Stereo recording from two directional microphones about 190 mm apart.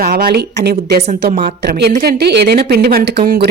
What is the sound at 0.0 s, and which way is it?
A woman's voice, 50° right (ahead or behind).